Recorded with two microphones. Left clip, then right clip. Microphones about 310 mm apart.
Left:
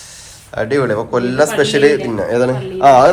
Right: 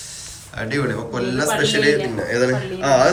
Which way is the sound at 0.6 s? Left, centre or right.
Centre.